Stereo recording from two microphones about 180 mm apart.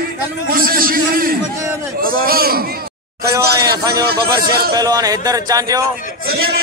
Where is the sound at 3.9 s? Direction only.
60° right (ahead or behind).